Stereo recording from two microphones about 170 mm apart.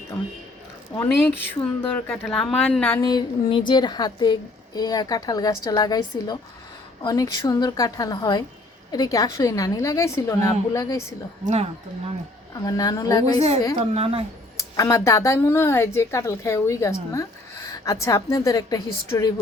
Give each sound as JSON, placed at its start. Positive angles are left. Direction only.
{"t": 0.9, "sound": "speech", "side_deg": 15}
{"t": 3.0, "sound": "a woman's voice", "side_deg": 25}
{"t": 11.4, "sound": "a woman's voice", "side_deg": -35}
{"t": 12.6, "sound": "a woman's voice", "side_deg": 20}
{"t": 13.9, "sound": "a woman's voice", "side_deg": -35}
{"t": 14.8, "sound": "a woman's voice", "side_deg": 20}